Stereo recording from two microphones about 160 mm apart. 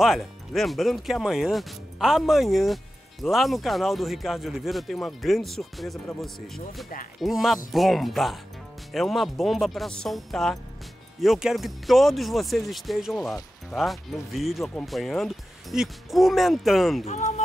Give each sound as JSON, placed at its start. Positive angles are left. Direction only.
{"t": 0.0, "sound": "speech", "side_deg": 0}
{"t": 17.0, "sound": "speech", "side_deg": 45}